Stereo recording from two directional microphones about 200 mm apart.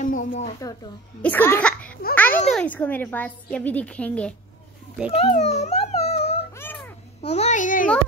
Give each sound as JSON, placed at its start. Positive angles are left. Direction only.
{"t": 0.0, "sound": "speech", "side_deg": 40}
{"t": 1.2, "sound": "a woman's voice", "side_deg": 10}
{"t": 5.1, "sound": "a sound", "side_deg": 30}
{"t": 6.6, "sound": "babbling", "side_deg": 10}
{"t": 7.2, "sound": "a child's voice", "side_deg": 35}